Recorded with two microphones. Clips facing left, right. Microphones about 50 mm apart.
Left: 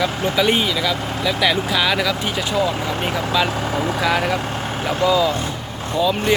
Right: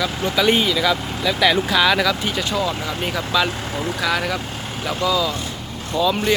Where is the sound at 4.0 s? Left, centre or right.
Left.